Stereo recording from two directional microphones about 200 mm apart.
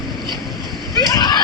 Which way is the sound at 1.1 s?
20° left (ahead or behind).